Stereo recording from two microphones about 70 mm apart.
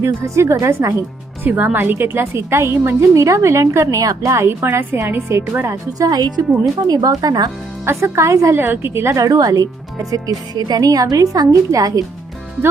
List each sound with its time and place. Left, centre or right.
0.0 s a woman's voice: right
1.5 s a woman's voice: right
5.6 s a woman's voice: right
6.1 s speech: right
6.8 s speech: right
7.9 s a woman's voice: right
8.5 s a woman's voice: right
9.1 s speech: right